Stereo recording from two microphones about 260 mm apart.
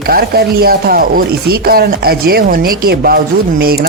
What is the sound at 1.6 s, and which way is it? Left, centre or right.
Speech, right.